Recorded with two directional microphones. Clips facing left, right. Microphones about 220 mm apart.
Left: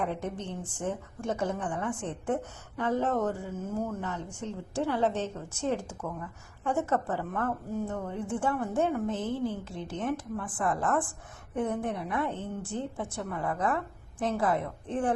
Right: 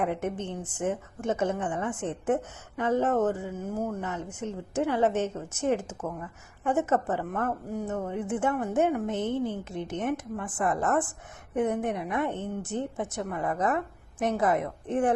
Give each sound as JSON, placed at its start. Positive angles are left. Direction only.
{"t": 0.0, "sound": "a woman's voice", "side_deg": -20}